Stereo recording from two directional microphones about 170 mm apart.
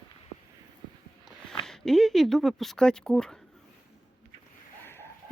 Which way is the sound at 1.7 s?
Centre (ahead or behind).